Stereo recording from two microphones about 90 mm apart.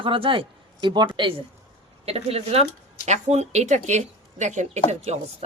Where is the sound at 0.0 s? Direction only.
75° right (ahead or behind).